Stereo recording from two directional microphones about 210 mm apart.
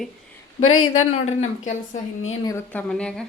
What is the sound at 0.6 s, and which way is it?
Speech, 80° left.